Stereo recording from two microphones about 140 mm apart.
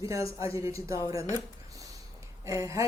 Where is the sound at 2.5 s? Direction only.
20° right (ahead or behind).